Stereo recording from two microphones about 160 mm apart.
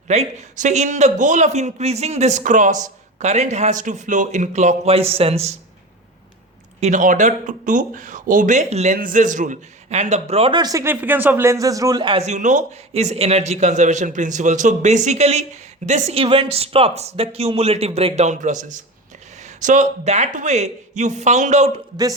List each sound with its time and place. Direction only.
0.1 s a man's voice: 45° right (ahead or behind)
6.7 s a man's voice: 50° right (ahead or behind); by 12.2 s 30° right (ahead or behind)
12.2 s a man's voice: 50° right (ahead or behind)